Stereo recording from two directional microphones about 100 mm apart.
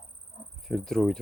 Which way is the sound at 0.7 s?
5° left (ahead or behind).